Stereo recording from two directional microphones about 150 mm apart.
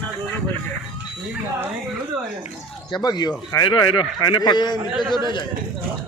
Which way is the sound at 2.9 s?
30° left (ahead or behind).